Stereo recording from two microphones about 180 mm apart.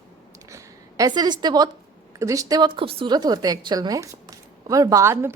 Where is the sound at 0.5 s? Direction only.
20° right (ahead or behind).